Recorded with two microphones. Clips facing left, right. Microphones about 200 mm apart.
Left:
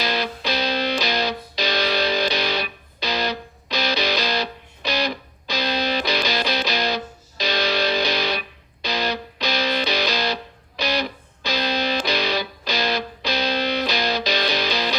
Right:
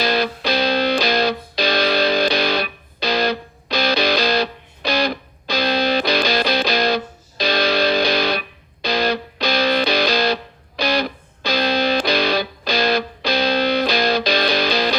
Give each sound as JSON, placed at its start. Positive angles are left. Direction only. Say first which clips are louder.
{"t": 0.0, "sound": "music", "louder": "right 5 dB", "side_deg": -55}